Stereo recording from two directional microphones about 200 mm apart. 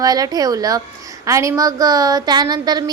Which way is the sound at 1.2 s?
15° right (ahead or behind).